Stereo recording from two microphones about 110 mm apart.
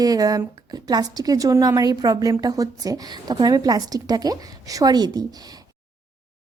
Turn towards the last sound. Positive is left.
turn(degrees=-40)  # may be behind; listen again after turning